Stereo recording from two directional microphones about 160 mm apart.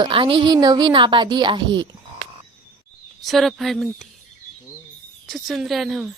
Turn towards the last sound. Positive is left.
turn(degrees=-5)  # may be behind; listen again after turning